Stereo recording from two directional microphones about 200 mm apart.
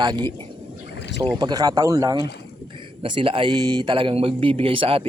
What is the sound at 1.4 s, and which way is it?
Speech, 20° right (ahead or behind).